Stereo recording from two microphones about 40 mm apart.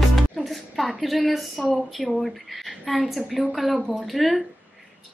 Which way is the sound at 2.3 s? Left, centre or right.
Centre.